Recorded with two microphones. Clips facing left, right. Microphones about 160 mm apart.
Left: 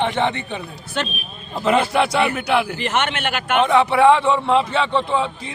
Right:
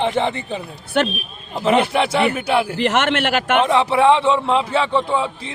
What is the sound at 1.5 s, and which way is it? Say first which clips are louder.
A man's voice: right 1 dB; 20° right (ahead or behind).